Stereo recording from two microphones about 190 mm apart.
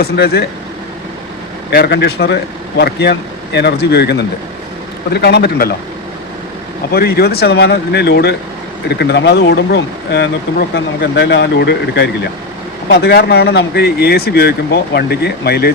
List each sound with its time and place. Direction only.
0.0 s speech: 55° left (ahead or behind)
1.7 s speech: 60° left (ahead or behind)
6.9 s speech: 55° left (ahead or behind)